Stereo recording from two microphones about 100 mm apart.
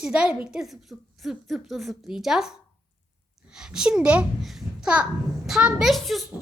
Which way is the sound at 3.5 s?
5° right (ahead or behind).